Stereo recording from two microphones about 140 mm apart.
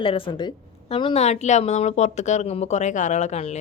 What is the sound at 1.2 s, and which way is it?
Speech, 55° left (ahead or behind).